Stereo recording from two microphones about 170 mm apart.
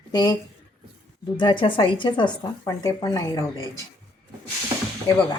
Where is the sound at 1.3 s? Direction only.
30° left (ahead or behind).